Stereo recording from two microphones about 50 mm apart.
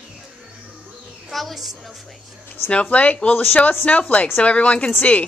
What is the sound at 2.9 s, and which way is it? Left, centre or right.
Speech, left.